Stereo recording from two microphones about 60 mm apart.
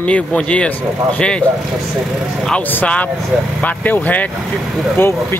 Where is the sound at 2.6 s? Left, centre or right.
Left.